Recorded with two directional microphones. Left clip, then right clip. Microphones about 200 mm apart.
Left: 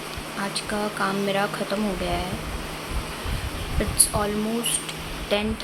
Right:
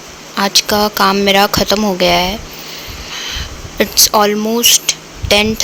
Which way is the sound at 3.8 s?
55° right (ahead or behind).